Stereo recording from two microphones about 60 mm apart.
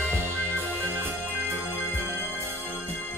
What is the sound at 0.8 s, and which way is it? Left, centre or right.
Music, right.